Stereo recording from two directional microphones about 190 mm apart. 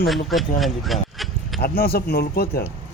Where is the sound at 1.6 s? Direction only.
50° left (ahead or behind).